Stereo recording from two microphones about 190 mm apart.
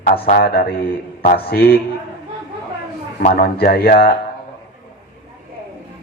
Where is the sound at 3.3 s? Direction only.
50° left (ahead or behind).